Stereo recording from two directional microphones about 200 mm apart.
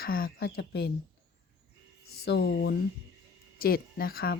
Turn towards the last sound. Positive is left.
turn(degrees=50)  # may be behind; listen again after turning